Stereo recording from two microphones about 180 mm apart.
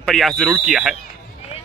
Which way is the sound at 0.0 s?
Centre (ahead or behind).